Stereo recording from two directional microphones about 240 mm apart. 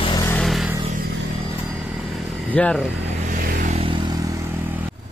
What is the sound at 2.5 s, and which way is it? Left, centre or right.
Speech, centre.